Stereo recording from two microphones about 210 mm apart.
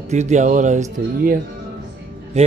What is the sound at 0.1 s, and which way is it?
Speech, 35° right (ahead or behind).